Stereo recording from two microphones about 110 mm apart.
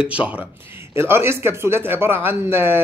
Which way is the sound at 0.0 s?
10° right (ahead or behind).